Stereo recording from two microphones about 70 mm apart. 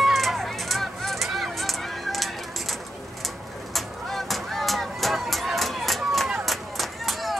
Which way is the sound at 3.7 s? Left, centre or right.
Centre.